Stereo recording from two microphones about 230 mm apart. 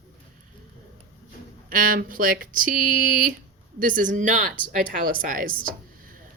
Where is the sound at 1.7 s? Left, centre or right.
Right.